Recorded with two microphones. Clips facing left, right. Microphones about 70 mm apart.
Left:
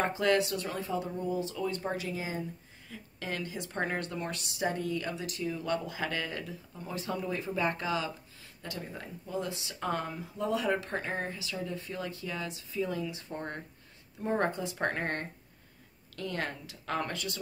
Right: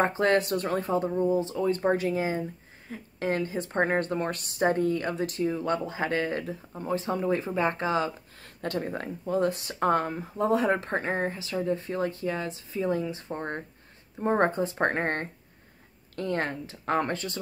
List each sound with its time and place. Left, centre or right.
0.0 s a woman's voice: right
8.5 s a woman's voice: right